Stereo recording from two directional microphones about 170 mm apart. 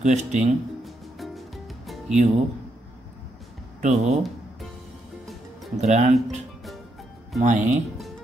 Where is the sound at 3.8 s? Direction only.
40° right (ahead or behind).